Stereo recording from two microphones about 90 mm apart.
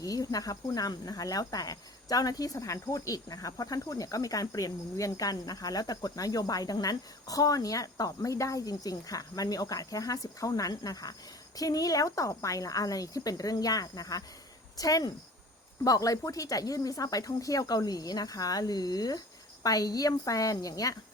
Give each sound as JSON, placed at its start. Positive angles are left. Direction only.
{"t": 0.0, "sound": "speech", "side_deg": 45}